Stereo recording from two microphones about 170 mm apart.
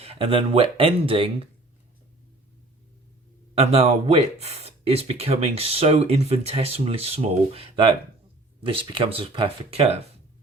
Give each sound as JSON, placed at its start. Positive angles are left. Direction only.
{"t": 0.0, "sound": "speech", "side_deg": -35}
{"t": 3.6, "sound": "speech", "side_deg": -35}